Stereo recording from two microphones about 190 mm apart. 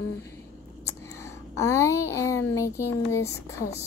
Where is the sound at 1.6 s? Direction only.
15° left (ahead or behind).